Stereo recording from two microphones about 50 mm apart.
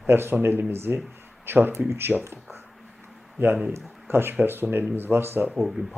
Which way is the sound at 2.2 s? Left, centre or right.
Right.